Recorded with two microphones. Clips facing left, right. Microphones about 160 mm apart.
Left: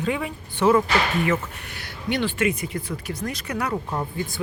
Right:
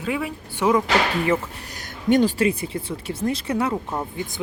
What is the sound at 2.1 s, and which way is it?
Speech, 40° right (ahead or behind).